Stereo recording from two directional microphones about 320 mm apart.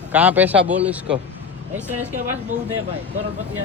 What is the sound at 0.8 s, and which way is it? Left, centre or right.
Speech, centre.